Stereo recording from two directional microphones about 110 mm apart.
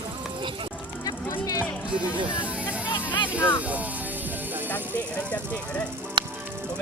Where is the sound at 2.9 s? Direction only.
45° left (ahead or behind).